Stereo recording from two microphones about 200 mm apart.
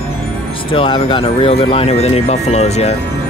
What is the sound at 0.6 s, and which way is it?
Speech, 25° left (ahead or behind).